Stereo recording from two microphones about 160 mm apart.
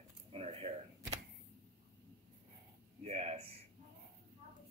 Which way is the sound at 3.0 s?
40° right (ahead or behind).